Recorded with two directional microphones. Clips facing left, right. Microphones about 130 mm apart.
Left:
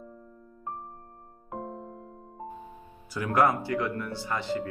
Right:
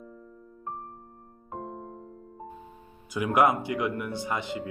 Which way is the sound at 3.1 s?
15° right (ahead or behind).